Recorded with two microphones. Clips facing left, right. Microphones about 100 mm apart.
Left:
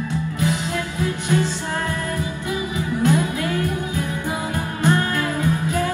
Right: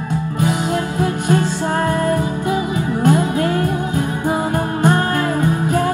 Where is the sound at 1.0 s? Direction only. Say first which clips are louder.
Right 3 dB; 50° right (ahead or behind).